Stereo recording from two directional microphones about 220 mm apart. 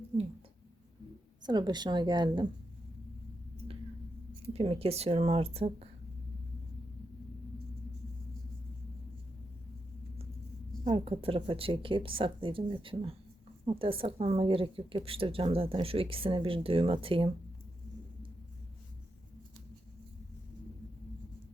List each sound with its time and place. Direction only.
1.5 s a woman's voice: 20° right (ahead or behind)
4.5 s a woman's voice: 25° right (ahead or behind)
10.8 s a woman's voice: 25° right (ahead or behind)